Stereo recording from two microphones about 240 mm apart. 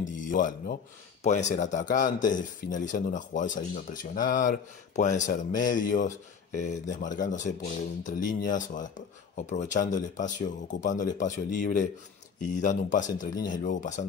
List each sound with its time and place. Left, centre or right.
0.3 s speech: left